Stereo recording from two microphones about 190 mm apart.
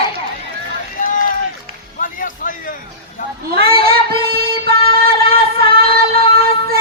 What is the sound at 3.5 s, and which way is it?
Child singing, 55° right (ahead or behind).